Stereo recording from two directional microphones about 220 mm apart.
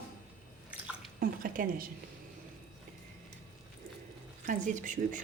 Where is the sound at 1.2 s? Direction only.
40° right (ahead or behind).